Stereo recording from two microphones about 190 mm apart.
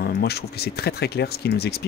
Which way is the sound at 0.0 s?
55° left (ahead or behind).